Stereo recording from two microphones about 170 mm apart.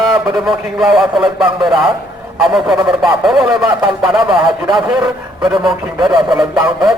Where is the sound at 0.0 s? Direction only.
Centre (ahead or behind).